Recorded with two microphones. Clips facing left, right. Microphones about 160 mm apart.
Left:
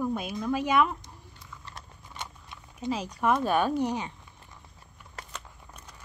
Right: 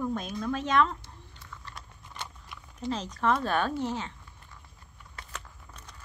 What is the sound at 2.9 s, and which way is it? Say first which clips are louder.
Speech: left 1 dB; 10° left (ahead or behind).